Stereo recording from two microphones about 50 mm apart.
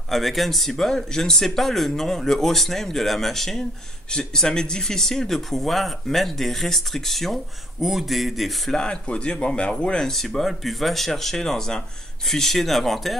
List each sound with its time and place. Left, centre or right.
0.1 s speech: centre
8.7 s speech: centre
9.9 s speech: centre